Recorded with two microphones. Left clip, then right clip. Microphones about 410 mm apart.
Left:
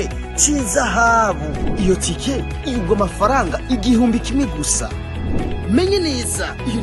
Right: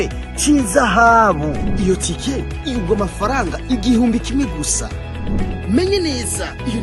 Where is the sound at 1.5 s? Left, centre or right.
Centre.